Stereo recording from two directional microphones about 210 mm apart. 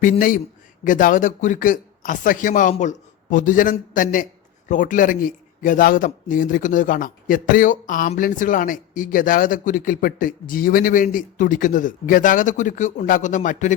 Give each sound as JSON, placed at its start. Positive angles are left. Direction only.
{"t": 0.0, "sound": "a man's voice", "side_deg": 40}